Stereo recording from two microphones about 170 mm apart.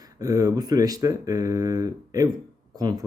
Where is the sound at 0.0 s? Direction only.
20° right (ahead or behind).